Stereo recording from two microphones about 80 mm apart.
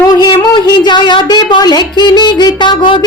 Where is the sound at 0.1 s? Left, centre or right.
Left.